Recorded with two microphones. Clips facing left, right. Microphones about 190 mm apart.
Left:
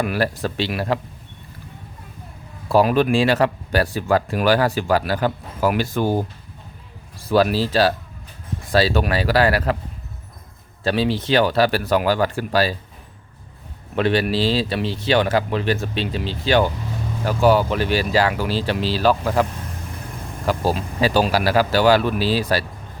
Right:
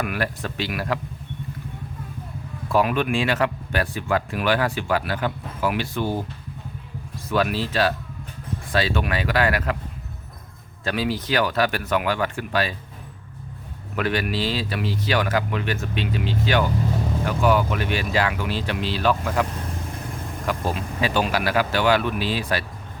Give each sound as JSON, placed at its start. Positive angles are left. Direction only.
{"t": 0.0, "sound": "speech", "side_deg": 30}
{"t": 2.6, "sound": "speech", "side_deg": 35}
{"t": 7.3, "sound": "speech", "side_deg": 35}
{"t": 10.8, "sound": "speech", "side_deg": 30}
{"t": 13.9, "sound": "speech", "side_deg": 30}
{"t": 20.5, "sound": "speech", "side_deg": 35}